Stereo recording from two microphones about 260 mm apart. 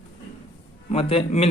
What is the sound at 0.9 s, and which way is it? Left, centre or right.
Speech, left.